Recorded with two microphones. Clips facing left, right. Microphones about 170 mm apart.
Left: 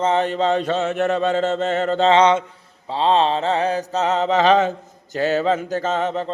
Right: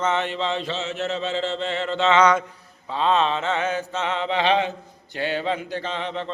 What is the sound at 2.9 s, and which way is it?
Speech, 30° left (ahead or behind).